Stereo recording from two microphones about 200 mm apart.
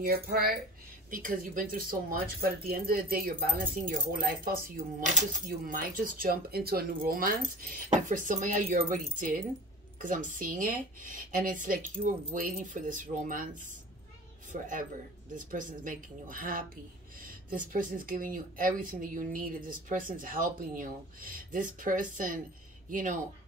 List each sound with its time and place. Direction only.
0.0 s speech: 50° right (ahead or behind)